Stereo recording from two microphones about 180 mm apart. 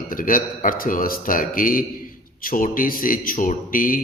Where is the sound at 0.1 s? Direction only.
50° left (ahead or behind).